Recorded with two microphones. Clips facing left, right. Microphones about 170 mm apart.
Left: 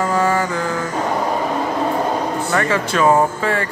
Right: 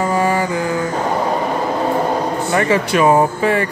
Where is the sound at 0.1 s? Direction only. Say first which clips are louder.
Right 1 dB; 15° right (ahead or behind).